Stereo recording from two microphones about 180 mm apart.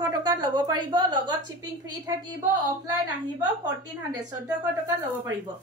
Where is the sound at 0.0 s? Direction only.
20° right (ahead or behind).